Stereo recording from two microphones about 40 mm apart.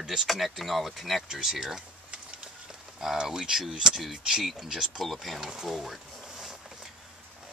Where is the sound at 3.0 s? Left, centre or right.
Centre.